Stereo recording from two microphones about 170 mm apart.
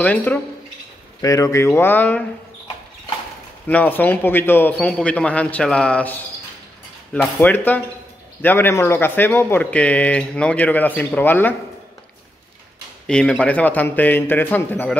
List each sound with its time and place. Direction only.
0.0 s a man's voice: 10° left (ahead or behind)
3.6 s a man's voice: 10° left (ahead or behind)
7.2 s a man's voice: 10° left (ahead or behind)
13.0 s a man's voice: 5° left (ahead or behind)